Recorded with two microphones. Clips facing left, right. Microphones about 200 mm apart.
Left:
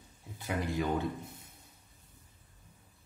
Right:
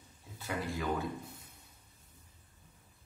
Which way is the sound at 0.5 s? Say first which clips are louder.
Left 3 dB; 25° left (ahead or behind).